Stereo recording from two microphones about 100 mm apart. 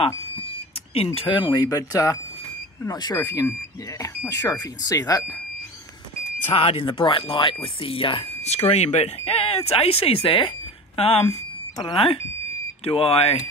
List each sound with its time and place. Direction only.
0.9 s speech: 75° left (ahead or behind)
1.3 s speech: 40° left (ahead or behind)
6.5 s speech: 75° left (ahead or behind)
11.0 s speech: 75° left (ahead or behind)
11.9 s speech: 60° left (ahead or behind)
12.8 s speech: 70° left (ahead or behind)